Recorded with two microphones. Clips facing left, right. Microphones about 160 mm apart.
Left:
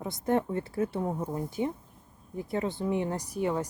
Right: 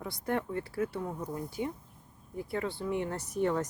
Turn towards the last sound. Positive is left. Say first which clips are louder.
# even
turn(degrees=10)  # may be behind; listen again after turning